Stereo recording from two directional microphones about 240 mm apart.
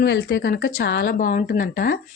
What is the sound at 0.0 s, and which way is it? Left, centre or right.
Speech, left.